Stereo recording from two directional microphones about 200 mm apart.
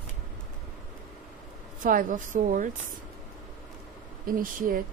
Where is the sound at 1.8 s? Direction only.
40° right (ahead or behind).